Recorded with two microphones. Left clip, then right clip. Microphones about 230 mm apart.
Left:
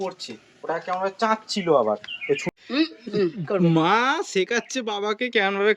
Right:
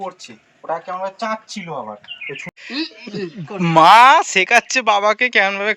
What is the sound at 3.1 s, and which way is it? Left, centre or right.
Speech, left.